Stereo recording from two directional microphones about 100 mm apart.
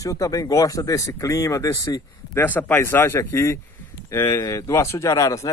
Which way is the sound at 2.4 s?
20° left (ahead or behind).